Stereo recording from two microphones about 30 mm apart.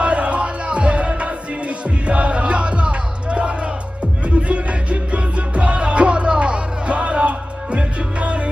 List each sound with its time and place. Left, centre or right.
0.0 s music: right